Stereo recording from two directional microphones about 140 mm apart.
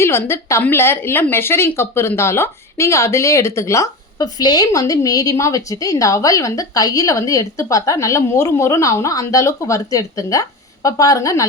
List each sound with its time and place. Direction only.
0.0 s a woman's voice: 20° left (ahead or behind)